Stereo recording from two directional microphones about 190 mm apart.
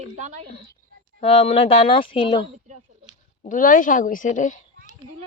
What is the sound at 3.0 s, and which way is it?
Speech, 45° left (ahead or behind).